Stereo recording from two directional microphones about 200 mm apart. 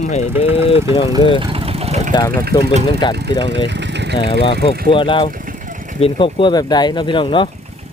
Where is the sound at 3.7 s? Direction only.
60° right (ahead or behind).